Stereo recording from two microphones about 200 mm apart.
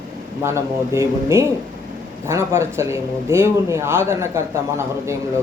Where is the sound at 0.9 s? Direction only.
15° right (ahead or behind).